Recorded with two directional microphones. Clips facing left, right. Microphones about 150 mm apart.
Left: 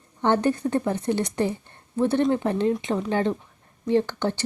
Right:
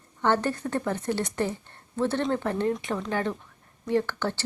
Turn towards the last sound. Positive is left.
turn(degrees=20)  # may be behind; listen again after turning